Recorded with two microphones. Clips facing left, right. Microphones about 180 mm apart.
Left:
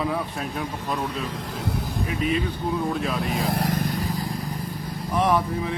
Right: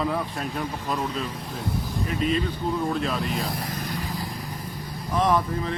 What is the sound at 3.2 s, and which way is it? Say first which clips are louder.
Speech: left 5 dB; 70° left (ahead or behind).